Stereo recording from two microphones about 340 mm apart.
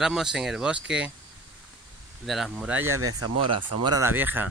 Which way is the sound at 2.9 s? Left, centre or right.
Right.